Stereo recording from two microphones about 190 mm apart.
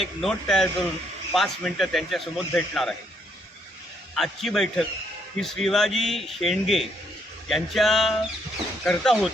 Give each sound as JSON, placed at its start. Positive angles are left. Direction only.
{"t": 0.0, "sound": "speech", "side_deg": 0}
{"t": 4.1, "sound": "speech", "side_deg": 0}